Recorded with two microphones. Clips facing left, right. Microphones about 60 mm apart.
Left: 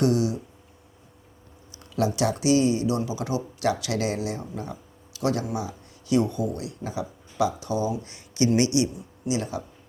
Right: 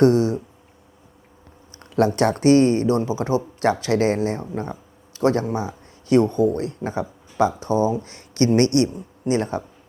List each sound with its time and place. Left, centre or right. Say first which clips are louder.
0.0 s speech: right 7 dB; right
1.7 s speech: right 6 dB; right